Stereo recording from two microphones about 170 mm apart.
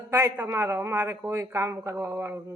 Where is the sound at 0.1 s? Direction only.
15° right (ahead or behind).